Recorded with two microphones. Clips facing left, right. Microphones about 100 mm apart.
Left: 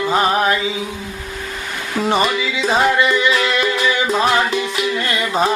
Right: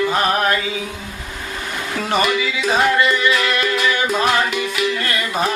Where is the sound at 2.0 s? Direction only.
20° left (ahead or behind).